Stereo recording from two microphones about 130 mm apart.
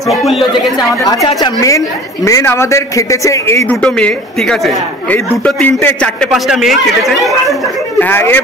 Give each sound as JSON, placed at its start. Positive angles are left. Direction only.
{"t": 0.1, "sound": "a man's voice", "side_deg": 0}
{"t": 1.0, "sound": "speech", "side_deg": 25}
{"t": 3.8, "sound": "a man's voice", "side_deg": 5}
{"t": 6.3, "sound": "a man's voice", "side_deg": 0}
{"t": 8.0, "sound": "a man's voice", "side_deg": 15}